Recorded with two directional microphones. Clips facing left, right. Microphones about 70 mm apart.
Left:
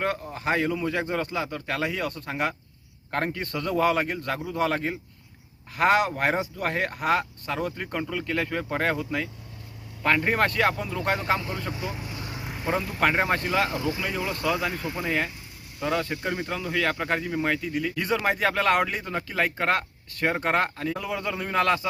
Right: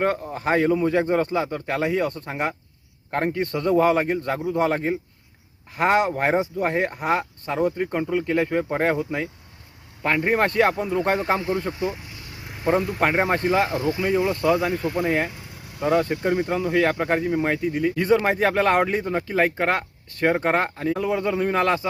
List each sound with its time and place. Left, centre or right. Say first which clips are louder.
0.0 s a man's voice: right 5 dB; right
3.1 s speech: right 4 dB; centre
3.4 s a man's voice: right 6 dB; right